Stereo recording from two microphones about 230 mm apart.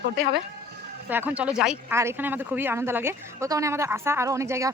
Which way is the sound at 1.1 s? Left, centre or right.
Centre.